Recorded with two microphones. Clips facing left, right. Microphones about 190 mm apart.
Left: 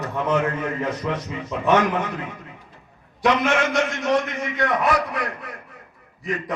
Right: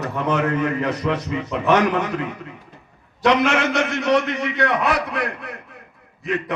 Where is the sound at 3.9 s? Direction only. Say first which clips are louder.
Right 3 dB; 70° right (ahead or behind).